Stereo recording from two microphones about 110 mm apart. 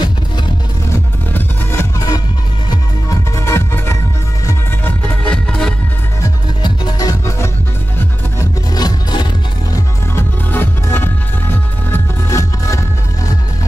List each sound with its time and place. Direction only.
1.3 s music: 20° left (ahead or behind)
2.0 s music: 35° left (ahead or behind)
4.8 s music: 5° left (ahead or behind)
6.6 s music: 40° left (ahead or behind)
8.7 s music: 40° left (ahead or behind)
10.1 s music: 20° left (ahead or behind)